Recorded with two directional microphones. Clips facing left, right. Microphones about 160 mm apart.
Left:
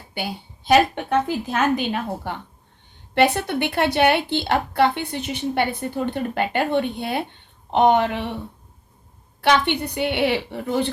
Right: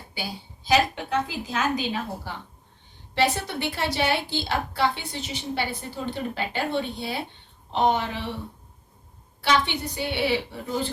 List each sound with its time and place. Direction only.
0.1 s a woman's voice: 60° left (ahead or behind)
9.4 s a woman's voice: 60° left (ahead or behind)